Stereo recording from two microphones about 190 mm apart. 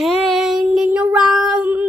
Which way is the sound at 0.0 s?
Centre (ahead or behind).